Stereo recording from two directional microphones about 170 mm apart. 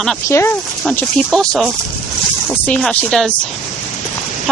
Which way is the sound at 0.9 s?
5° left (ahead or behind).